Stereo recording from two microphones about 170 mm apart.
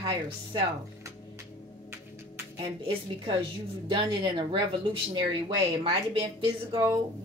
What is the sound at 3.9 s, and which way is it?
Speech, 30° right (ahead or behind).